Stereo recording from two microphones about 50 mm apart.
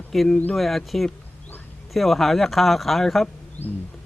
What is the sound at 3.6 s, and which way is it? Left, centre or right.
Wild animals, left.